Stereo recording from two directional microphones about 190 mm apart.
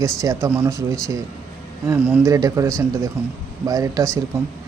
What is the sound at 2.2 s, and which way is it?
Speech, 15° right (ahead or behind).